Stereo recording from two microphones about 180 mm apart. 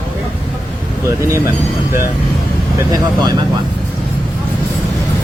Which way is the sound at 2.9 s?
20° right (ahead or behind).